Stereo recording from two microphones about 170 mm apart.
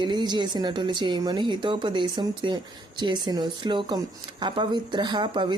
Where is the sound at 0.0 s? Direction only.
25° right (ahead or behind).